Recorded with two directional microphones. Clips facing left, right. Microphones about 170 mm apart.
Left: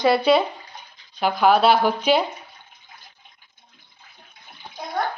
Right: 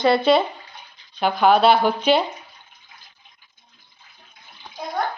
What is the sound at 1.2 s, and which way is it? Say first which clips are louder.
A woman's voice: right 1 dB; 5° left (ahead or behind).